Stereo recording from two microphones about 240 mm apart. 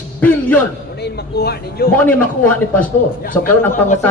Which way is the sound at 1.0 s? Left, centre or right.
Left.